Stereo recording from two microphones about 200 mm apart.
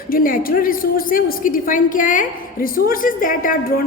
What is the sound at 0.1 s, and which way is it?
A woman's voice, 45° left (ahead or behind).